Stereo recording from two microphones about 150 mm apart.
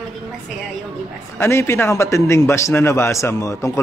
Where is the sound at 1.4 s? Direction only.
15° left (ahead or behind).